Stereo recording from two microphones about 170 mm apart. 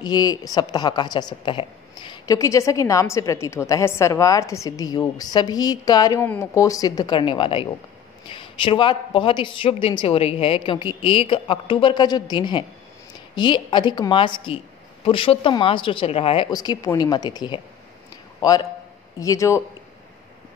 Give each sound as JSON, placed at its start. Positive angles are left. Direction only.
{"t": 0.0, "sound": "a woman's voice", "side_deg": 25}
{"t": 16.4, "sound": "a woman's voice", "side_deg": 25}